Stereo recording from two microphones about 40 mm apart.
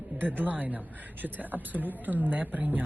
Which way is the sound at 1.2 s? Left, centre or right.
Right.